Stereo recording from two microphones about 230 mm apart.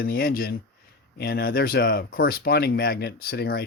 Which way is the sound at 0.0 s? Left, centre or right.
Left.